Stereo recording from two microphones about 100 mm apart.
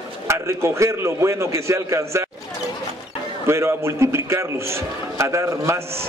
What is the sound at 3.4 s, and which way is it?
A man's voice, 25° right (ahead or behind).